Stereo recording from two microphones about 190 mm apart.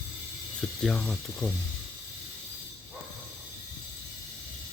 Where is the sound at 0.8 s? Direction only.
5° left (ahead or behind).